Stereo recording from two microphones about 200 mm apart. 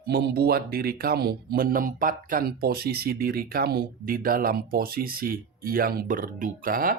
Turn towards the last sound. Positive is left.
turn(degrees=-45)  # may be behind; listen again after turning